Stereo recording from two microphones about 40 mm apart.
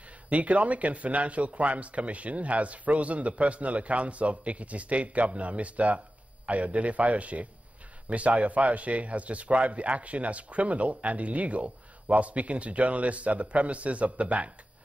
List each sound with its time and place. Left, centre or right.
0.3 s a man's voice: right